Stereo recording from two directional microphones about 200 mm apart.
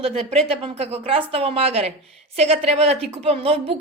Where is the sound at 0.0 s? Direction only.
30° right (ahead or behind).